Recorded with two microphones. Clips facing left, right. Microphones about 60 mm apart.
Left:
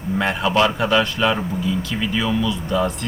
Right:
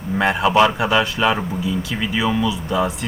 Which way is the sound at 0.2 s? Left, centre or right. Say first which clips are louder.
Right 3 dB; centre.